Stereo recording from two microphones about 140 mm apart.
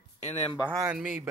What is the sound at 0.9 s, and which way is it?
Speech, 5° right (ahead or behind).